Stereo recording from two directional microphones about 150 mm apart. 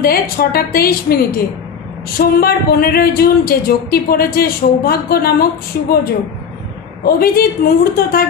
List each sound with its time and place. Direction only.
0.0 s speech: 90° left
7.1 s a woman's voice: 80° left